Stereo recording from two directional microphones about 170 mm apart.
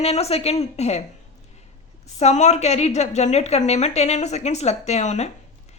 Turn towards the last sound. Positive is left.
turn(degrees=40)  # may be behind; listen again after turning